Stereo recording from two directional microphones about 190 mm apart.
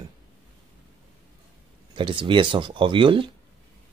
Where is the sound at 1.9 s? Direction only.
25° right (ahead or behind).